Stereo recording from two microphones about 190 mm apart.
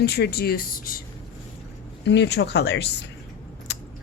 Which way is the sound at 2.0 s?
65° left (ahead or behind).